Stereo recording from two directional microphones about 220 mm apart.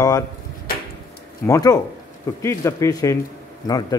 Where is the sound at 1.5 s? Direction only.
15° left (ahead or behind).